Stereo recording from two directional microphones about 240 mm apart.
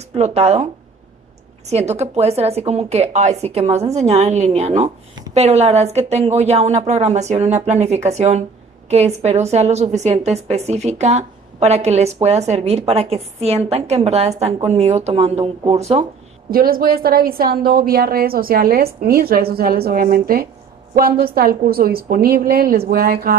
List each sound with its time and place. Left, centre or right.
0.1 s a woman's voice: right
1.7 s a woman's voice: right